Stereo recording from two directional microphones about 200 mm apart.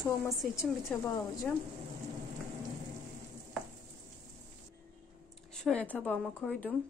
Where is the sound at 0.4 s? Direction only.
Centre (ahead or behind).